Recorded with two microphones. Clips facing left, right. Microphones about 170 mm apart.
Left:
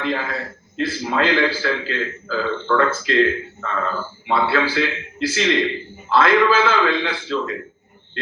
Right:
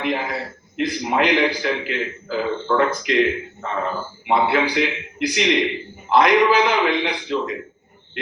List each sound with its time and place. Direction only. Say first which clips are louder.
0.0 s a man's voice: even; 15° right (ahead or behind)